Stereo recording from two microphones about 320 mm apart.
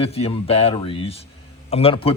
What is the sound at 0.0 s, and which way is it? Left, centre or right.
Speech, centre.